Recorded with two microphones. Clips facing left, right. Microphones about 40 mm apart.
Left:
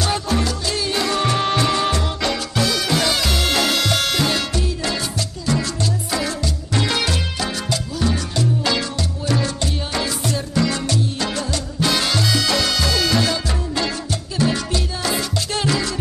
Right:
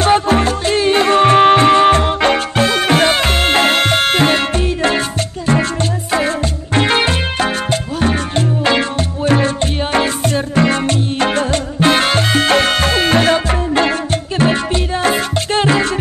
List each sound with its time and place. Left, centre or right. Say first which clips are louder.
0.0 s music: right 9 dB; right
6.1 s music: right 11 dB; right